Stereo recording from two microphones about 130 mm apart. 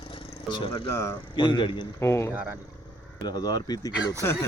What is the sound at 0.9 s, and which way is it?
Speech, 20° left (ahead or behind).